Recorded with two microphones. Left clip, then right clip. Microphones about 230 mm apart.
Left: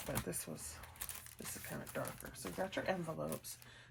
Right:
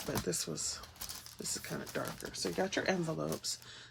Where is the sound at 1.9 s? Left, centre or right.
Right.